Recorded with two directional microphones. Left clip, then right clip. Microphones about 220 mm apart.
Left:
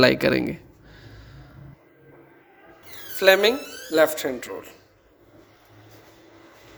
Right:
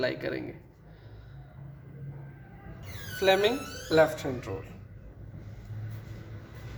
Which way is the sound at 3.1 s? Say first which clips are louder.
Left 7 dB; 50° left (ahead or behind).